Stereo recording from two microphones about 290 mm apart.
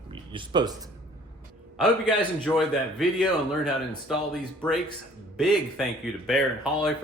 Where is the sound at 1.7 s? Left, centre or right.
Centre.